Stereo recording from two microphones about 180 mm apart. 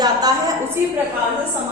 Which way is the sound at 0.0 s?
20° right (ahead or behind).